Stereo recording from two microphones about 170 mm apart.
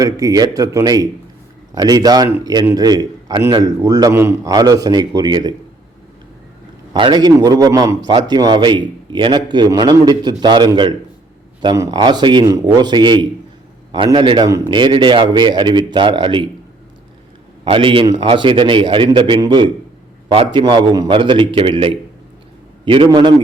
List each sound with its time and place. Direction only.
0.0 s a man's voice: 20° right (ahead or behind)
6.9 s a man's voice: 25° right (ahead or behind)
17.7 s a man's voice: 30° right (ahead or behind)
23.0 s a man's voice: 25° right (ahead or behind)